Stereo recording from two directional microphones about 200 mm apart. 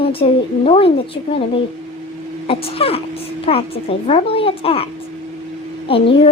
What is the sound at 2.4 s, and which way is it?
A woman's voice, 30° left (ahead or behind).